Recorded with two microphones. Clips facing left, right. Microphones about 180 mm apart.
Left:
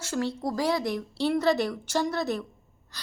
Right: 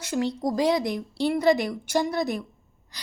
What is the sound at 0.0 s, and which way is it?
A woman's voice, 15° right (ahead or behind).